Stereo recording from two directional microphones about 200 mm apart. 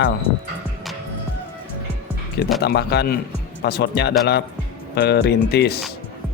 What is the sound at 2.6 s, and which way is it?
Speech, 55° left (ahead or behind).